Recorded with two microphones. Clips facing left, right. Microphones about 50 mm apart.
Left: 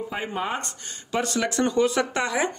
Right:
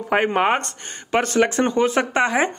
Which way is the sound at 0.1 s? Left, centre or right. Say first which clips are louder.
Right 13 dB; right.